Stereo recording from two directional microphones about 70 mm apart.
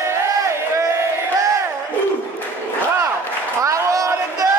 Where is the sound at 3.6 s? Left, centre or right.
Right.